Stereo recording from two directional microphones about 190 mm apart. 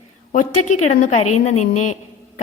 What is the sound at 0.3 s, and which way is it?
A woman's voice, 40° left (ahead or behind).